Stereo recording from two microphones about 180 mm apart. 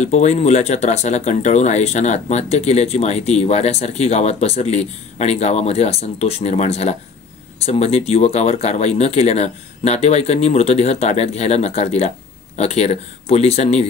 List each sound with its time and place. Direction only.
0.0 s speech: 40° left (ahead or behind)